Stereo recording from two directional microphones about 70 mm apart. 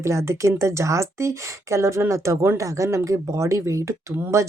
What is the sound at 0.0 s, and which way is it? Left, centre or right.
Speech, right.